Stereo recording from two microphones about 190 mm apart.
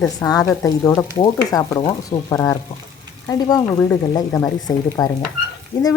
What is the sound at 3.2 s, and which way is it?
Speech, 20° left (ahead or behind).